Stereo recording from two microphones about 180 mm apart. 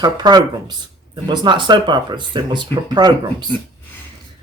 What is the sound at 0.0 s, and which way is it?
Speech, 20° right (ahead or behind).